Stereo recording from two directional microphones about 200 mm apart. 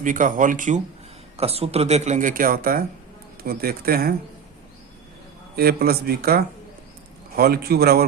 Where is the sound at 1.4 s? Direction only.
30° right (ahead or behind); by 4.1 s 50° right (ahead or behind).